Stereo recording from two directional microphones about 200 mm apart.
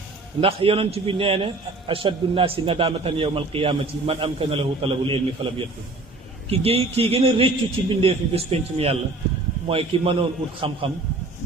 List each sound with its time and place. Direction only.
0.4 s a man's voice: 30° right (ahead or behind)